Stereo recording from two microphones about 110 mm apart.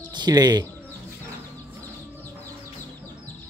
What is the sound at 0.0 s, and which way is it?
Speech, 40° right (ahead or behind).